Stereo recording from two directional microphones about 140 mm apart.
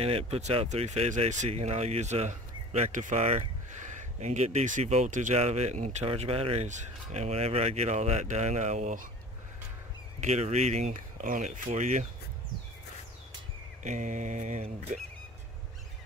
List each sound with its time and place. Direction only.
0.0 s speech: 45° right (ahead or behind)
10.2 s speech: 55° right (ahead or behind)
13.8 s speech: 65° right (ahead or behind)